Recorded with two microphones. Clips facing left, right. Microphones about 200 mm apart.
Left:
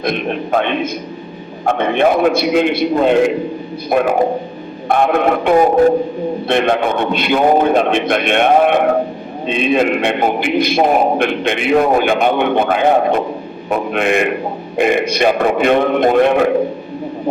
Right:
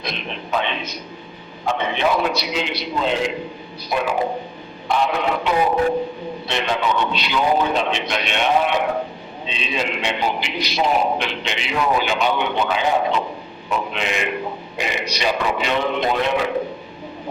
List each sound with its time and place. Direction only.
0.0 s a man's voice: 55° left (ahead or behind)